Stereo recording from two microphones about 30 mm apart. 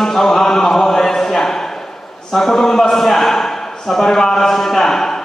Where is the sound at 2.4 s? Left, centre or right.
Centre.